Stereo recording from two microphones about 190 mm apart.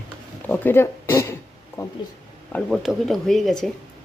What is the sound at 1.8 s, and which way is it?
Speech, 15° left (ahead or behind).